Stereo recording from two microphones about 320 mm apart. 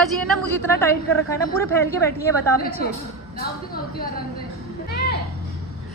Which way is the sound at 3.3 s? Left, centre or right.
Left.